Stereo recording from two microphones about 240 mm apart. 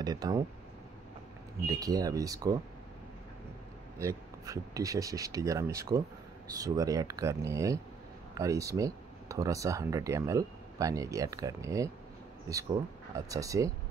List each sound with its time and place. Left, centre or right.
0.0 s speech: centre
1.7 s speech: centre
4.0 s speech: centre
13.1 s speech: centre